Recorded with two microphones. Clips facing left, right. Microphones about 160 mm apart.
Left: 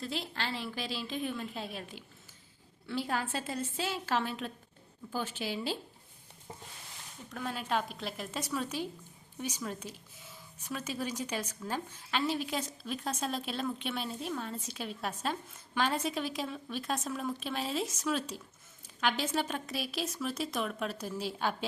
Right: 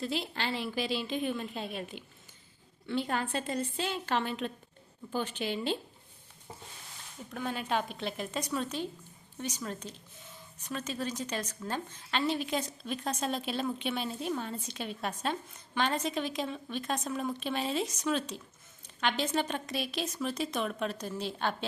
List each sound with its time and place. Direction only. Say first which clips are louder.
0.0 s speech: right 3 dB; centre (ahead or behind)
7.3 s a woman's voice: right 2 dB; centre (ahead or behind)